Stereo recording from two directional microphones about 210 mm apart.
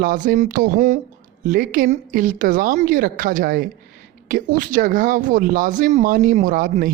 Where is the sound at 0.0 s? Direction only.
40° right (ahead or behind).